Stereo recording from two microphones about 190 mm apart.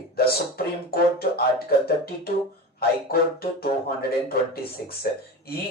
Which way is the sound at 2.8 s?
55° left (ahead or behind).